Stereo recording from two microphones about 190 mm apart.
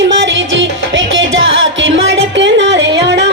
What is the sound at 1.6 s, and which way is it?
Music, 90° right.